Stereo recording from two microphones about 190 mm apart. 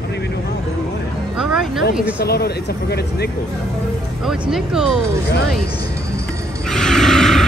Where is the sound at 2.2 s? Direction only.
55° left (ahead or behind).